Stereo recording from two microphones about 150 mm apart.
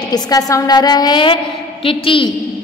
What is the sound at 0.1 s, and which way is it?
A woman's voice, 25° left (ahead or behind).